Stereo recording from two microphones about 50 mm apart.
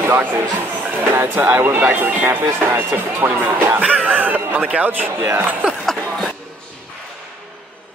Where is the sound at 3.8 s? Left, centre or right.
Right.